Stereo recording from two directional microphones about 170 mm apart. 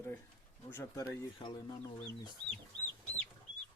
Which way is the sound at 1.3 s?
25° left (ahead or behind).